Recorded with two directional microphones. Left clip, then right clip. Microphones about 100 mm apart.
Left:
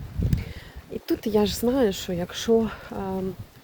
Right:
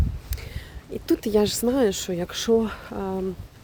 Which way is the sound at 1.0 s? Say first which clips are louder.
Right 2 dB; 40° right (ahead or behind).